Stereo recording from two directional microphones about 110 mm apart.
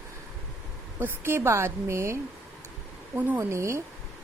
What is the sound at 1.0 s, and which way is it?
A woman's voice, 20° right (ahead or behind).